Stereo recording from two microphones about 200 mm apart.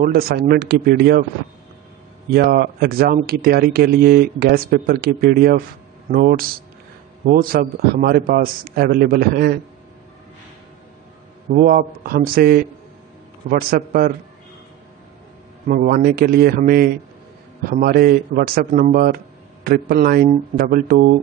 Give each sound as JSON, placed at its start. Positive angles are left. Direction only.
{"t": 0.0, "sound": "speech", "side_deg": -50}
{"t": 2.3, "sound": "speech", "side_deg": -50}
{"t": 11.5, "sound": "speech", "side_deg": -45}
{"t": 15.7, "sound": "speech", "side_deg": -45}